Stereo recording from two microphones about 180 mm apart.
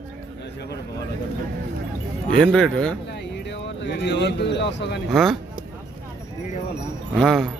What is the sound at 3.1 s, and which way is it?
Speech, 75° left (ahead or behind).